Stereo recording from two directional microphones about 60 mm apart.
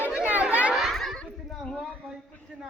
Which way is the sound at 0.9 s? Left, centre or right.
Centre.